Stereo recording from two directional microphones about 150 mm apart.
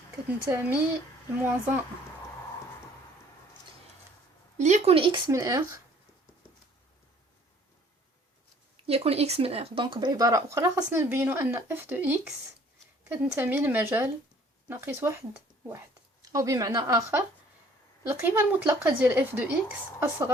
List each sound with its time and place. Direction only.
0.3 s a woman's voice: 10° right (ahead or behind)
4.5 s speech: 50° right (ahead or behind)
5.3 s speech: 20° right (ahead or behind)
8.9 s a woman's voice: 40° right (ahead or behind); by 15.2 s 15° right (ahead or behind)
16.3 s a woman's voice: 25° right (ahead or behind)